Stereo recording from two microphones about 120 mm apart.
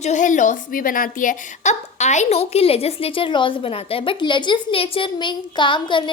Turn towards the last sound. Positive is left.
turn(degrees=40)  # may be behind; listen again after turning